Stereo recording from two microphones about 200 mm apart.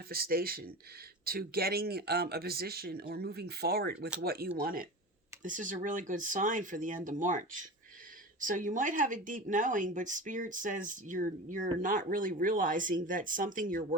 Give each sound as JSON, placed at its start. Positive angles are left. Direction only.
{"t": 0.1, "sound": "speech", "side_deg": -50}